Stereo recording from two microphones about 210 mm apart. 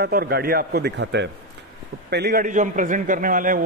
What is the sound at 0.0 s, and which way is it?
A man's voice, 45° right (ahead or behind).